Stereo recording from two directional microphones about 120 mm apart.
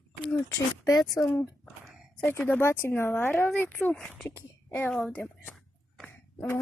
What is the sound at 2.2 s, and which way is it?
A woman's voice, 15° left (ahead or behind).